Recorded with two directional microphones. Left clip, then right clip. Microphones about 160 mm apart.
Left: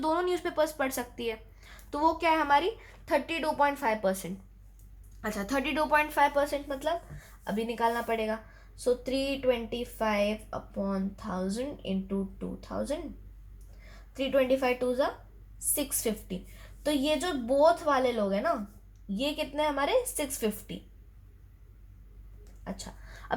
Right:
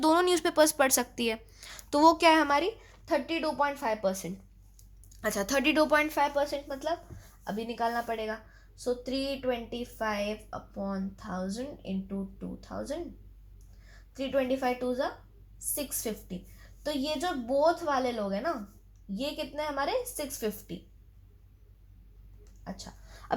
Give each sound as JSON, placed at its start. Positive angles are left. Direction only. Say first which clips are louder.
{"t": 0.0, "sound": "a woman's voice", "louder": "right 4 dB", "side_deg": -90}
{"t": 2.5, "sound": "speech", "louder": "left 2 dB", "side_deg": -30}
{"t": 3.1, "sound": "a woman's voice", "louder": "left 1 dB", "side_deg": -10}
{"t": 5.2, "sound": "speech", "louder": "right 4 dB", "side_deg": -60}
{"t": 6.1, "sound": "speech", "louder": "left 3 dB", "side_deg": -25}
{"t": 6.3, "sound": "a woman's voice", "louder": "left 1 dB", "side_deg": -10}
{"t": 14.1, "sound": "a woman's voice", "louder": "left 3 dB", "side_deg": -5}